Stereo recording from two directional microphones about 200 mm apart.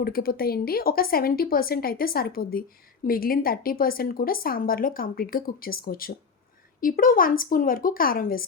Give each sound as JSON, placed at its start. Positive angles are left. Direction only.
{"t": 0.0, "sound": "speech", "side_deg": 50}